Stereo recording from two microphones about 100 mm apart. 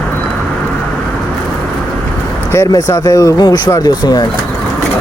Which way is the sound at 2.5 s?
30° left (ahead or behind).